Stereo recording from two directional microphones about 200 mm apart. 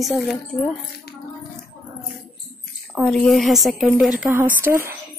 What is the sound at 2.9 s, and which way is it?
A woman's voice, centre (ahead or behind).